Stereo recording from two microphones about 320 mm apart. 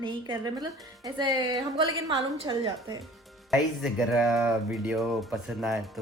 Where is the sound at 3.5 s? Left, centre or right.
Centre.